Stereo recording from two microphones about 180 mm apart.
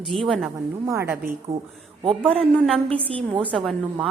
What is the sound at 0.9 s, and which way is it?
Speech, 15° right (ahead or behind).